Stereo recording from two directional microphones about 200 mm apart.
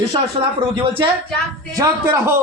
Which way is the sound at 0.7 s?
25° right (ahead or behind).